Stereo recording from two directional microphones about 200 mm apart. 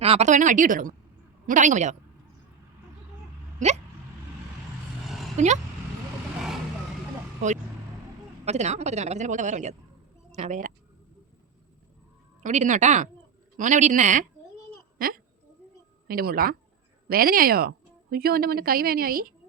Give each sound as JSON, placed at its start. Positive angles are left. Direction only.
{"t": 0.0, "sound": "speech", "side_deg": -30}
{"t": 3.6, "sound": "speech", "side_deg": -35}
{"t": 5.0, "sound": "a sound", "side_deg": 0}
{"t": 8.4, "sound": "speech", "side_deg": -35}
{"t": 12.4, "sound": "a woman's voice", "side_deg": -40}